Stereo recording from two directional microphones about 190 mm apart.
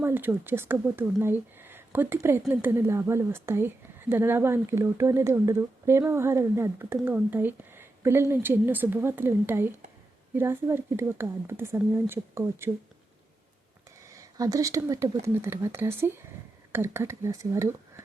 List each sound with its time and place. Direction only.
0.0 s speech: 10° right (ahead or behind)
14.0 s speech: 15° right (ahead or behind)